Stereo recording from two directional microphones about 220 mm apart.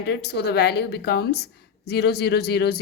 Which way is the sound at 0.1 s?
50° left (ahead or behind).